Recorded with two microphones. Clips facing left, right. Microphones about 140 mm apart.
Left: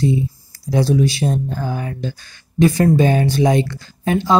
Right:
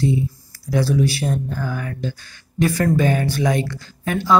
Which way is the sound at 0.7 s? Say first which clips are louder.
Left 2 dB; 25° left (ahead or behind).